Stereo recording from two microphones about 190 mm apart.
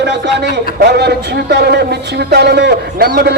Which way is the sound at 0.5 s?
60° right (ahead or behind).